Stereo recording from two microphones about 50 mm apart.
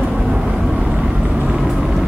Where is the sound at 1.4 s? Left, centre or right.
Centre.